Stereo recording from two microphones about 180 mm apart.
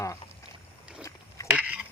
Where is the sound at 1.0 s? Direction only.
15° left (ahead or behind).